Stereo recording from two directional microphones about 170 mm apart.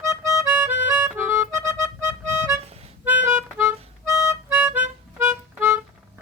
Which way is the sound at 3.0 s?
10° right (ahead or behind).